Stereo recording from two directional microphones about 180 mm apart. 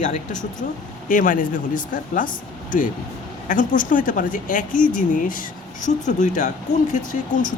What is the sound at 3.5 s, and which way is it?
Speech, 45° left (ahead or behind).